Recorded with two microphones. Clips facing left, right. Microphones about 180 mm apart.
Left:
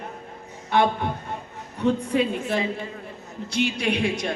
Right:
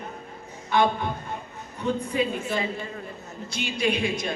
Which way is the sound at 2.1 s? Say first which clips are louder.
Left 3 dB; 70° left (ahead or behind).